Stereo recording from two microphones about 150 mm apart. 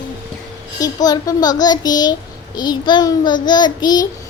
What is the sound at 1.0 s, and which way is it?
Child singing, 25° left (ahead or behind).